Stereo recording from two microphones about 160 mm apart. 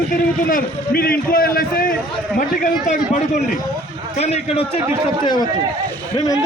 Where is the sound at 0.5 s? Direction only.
65° left (ahead or behind).